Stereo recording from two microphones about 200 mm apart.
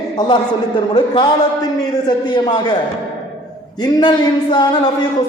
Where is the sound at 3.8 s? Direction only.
20° left (ahead or behind).